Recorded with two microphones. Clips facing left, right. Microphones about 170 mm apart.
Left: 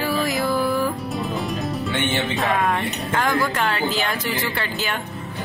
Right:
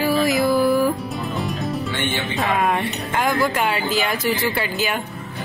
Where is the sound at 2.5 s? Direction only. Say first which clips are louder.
Right 4 dB; 20° right (ahead or behind).